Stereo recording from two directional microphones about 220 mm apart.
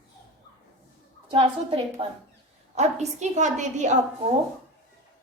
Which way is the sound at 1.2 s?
25° right (ahead or behind).